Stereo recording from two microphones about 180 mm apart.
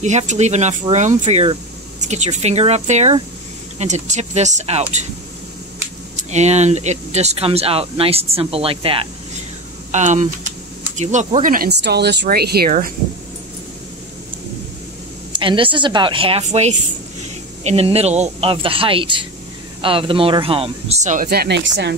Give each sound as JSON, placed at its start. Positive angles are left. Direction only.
{"t": 0.0, "sound": "speech", "side_deg": -40}
{"t": 6.1, "sound": "speech", "side_deg": -40}
{"t": 9.8, "sound": "speech", "side_deg": -40}
{"t": 15.3, "sound": "a woman's voice", "side_deg": -30}
{"t": 21.3, "sound": "speech", "side_deg": -65}